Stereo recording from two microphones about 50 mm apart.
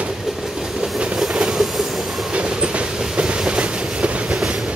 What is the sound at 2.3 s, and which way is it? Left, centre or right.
Train, right.